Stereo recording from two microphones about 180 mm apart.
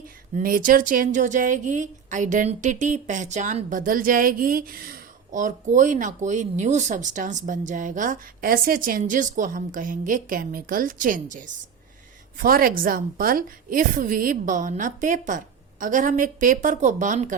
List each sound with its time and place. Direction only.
0.3 s speech: 50° right (ahead or behind)